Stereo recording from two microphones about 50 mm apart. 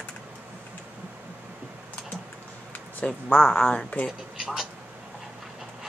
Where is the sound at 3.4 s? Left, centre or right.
Centre.